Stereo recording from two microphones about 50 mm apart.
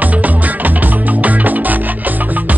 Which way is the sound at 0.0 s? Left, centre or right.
Right.